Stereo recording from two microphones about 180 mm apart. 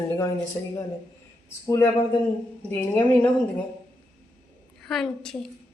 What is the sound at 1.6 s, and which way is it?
A woman's voice, 15° left (ahead or behind).